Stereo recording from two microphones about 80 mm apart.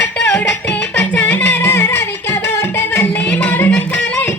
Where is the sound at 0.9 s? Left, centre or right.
Left.